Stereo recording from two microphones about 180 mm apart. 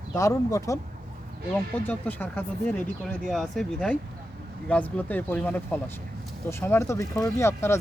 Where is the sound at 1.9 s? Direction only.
10° left (ahead or behind).